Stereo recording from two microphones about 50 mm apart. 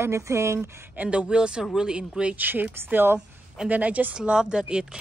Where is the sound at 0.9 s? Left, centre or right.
Right.